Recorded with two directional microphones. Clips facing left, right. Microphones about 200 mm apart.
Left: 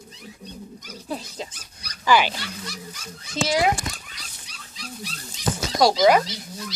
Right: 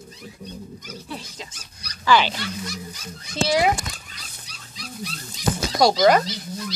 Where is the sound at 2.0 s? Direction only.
10° left (ahead or behind).